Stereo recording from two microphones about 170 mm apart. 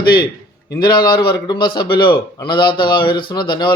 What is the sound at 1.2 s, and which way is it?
A man's voice, 25° left (ahead or behind).